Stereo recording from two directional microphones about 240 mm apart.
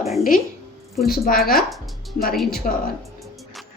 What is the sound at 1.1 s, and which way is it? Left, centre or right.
A woman's voice, left.